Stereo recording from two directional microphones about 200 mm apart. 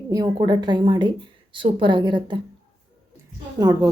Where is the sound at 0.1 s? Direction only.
20° right (ahead or behind).